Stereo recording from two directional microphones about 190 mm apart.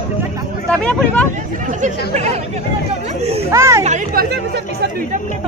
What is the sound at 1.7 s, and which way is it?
Speech, 40° right (ahead or behind).